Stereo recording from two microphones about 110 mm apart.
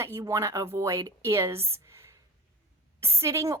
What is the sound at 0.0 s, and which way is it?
A woman's voice, 25° right (ahead or behind).